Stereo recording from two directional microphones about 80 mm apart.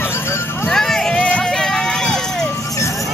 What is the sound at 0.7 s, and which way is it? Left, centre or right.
Run, centre.